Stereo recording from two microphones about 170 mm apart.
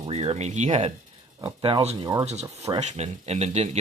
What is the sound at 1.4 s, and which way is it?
Speech, 25° right (ahead or behind).